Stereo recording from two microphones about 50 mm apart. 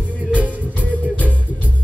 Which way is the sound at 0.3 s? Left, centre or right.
Centre.